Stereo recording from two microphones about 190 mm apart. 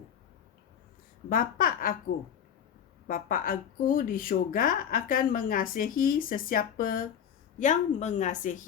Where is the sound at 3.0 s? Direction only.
45° left (ahead or behind).